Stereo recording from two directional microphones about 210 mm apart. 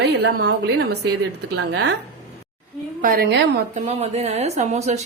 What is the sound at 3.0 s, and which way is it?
Speech, 45° right (ahead or behind).